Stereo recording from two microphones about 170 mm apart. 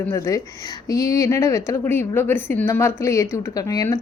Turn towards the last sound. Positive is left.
turn(degrees=20)  # may be behind; listen again after turning